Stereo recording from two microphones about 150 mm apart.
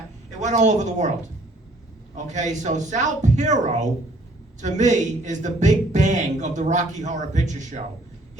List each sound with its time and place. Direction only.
0.3 s speech: 55° right (ahead or behind)
2.1 s speech: 55° right (ahead or behind)